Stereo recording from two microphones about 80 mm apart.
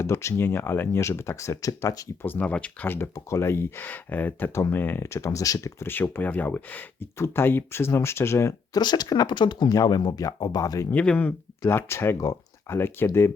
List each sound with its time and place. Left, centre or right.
0.0 s speech: left
2.2 s speech: left
3.2 s speech: left
5.0 s speech: left
5.8 s speech: left
8.7 s speech: left
9.7 s speech: left
10.9 s speech: centre
11.7 s speech: left